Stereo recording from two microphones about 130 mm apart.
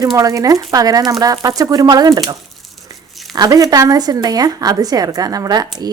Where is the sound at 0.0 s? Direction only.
25° right (ahead or behind).